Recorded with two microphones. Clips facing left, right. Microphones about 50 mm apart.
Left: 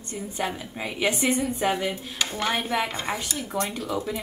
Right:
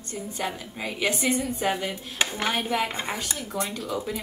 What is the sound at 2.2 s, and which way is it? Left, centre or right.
Speech, right.